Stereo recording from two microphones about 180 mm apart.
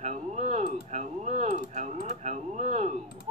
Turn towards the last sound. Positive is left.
turn(degrees=-40)  # may be behind; listen again after turning